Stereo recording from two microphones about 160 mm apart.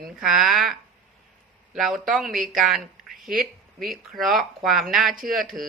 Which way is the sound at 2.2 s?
60° right (ahead or behind).